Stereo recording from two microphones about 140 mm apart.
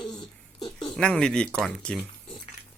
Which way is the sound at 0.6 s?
5° left (ahead or behind).